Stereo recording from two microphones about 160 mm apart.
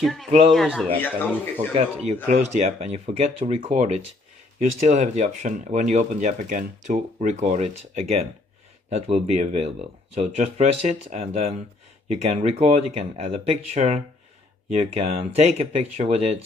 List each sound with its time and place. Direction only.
0.0 s speech: centre (ahead or behind)
2.2 s speech: 45° right (ahead or behind)